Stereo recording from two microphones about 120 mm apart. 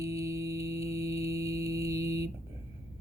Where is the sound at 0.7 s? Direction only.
60° left (ahead or behind).